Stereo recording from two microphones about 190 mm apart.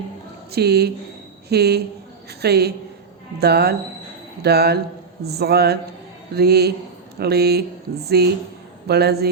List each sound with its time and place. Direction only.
0.5 s speech: 60° right (ahead or behind)